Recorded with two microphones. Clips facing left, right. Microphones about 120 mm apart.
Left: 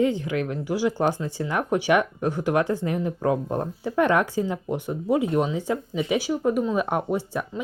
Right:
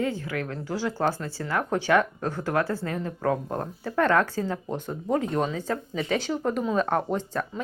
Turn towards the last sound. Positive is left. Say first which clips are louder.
# left 1 dB
turn(degrees=10)  # may be behind; listen again after turning